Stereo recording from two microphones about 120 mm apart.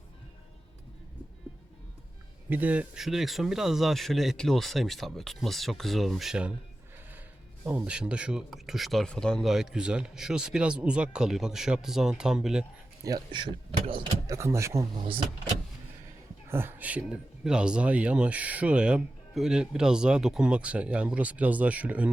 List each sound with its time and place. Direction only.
2.5 s speech: 15° right (ahead or behind)
7.6 s speech: 15° right (ahead or behind)
13.1 s speech: 40° right (ahead or behind)
14.3 s speech: 25° right (ahead or behind)
16.5 s speech: 20° right (ahead or behind)